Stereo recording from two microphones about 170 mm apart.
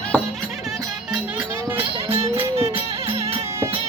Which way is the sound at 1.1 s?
10° right (ahead or behind).